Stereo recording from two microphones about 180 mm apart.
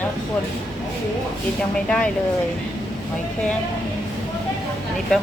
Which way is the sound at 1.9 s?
5° left (ahead or behind).